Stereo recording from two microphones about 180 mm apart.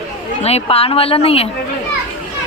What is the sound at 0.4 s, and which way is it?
A woman's voice, 35° left (ahead or behind).